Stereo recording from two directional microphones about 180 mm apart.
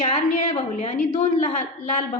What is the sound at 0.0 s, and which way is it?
A woman's voice, 35° left (ahead or behind).